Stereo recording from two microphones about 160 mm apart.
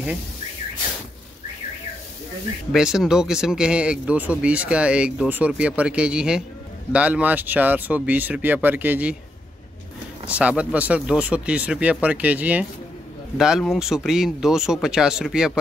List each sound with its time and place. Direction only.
2.7 s speech: 5° right (ahead or behind)
10.2 s speech: 10° right (ahead or behind)